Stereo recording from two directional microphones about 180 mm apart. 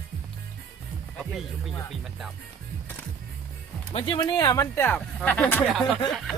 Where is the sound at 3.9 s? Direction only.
30° left (ahead or behind).